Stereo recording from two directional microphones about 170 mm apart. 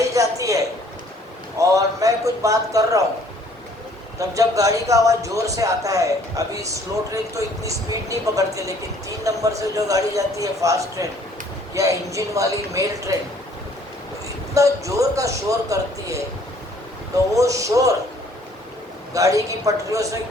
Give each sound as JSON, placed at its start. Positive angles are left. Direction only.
{"t": 0.1, "sound": "a woman's voice", "side_deg": -20}
{"t": 4.2, "sound": "a man's voice", "side_deg": -20}
{"t": 14.5, "sound": "a man's voice", "side_deg": -20}
{"t": 17.3, "sound": "a man's voice", "side_deg": -20}
{"t": 19.1, "sound": "a man's voice", "side_deg": -20}